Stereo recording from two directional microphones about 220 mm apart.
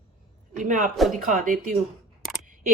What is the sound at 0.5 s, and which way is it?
Speech, 35° right (ahead or behind).